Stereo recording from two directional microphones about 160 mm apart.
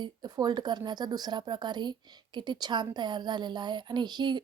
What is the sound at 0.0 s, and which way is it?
Speech, 25° right (ahead or behind).